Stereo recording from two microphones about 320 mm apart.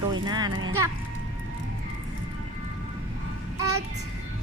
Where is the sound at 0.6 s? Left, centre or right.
Right.